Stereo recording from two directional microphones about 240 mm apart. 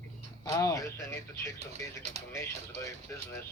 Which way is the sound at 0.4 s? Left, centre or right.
Centre.